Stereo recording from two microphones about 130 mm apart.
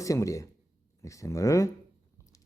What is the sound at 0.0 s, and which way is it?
Speech, 25° left (ahead or behind).